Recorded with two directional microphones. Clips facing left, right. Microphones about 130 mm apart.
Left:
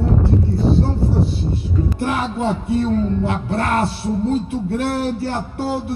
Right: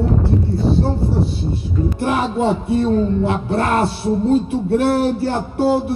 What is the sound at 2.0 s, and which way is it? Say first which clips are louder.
Speech: right 4 dB; 25° right (ahead or behind).